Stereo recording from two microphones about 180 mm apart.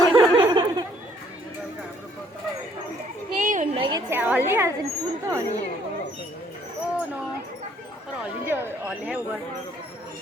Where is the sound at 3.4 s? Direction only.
45° right (ahead or behind).